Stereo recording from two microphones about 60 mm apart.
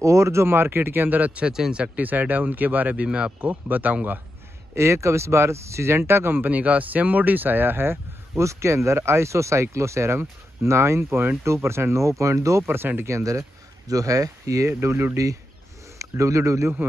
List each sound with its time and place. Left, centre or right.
0.0 s speech: right
1.5 s speech: centre
1.8 s speech: right
4.7 s speech: right
11.4 s speech: right
12.6 s speech: right
13.1 s speech: right
14.7 s speech: right
16.0 s speech: right